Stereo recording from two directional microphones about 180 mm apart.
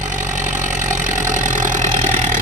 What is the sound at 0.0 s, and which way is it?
Engine, 45° right (ahead or behind).